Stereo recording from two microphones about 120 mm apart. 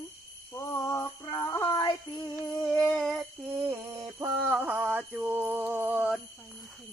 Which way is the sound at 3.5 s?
20° right (ahead or behind).